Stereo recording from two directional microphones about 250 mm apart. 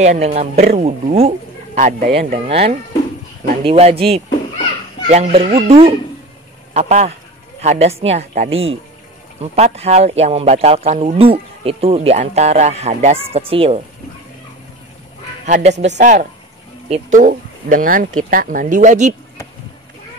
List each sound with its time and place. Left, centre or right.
0.0 s speech: right
15.4 s speech: right